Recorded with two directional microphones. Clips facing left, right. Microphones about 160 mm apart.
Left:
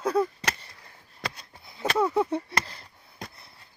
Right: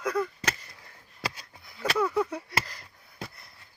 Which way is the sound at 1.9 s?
25° left (ahead or behind).